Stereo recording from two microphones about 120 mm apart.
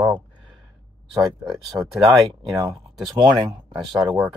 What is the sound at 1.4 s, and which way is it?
Speech, 5° right (ahead or behind).